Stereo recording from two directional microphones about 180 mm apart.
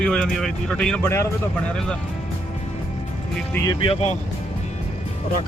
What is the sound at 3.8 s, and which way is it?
Speech, 35° left (ahead or behind).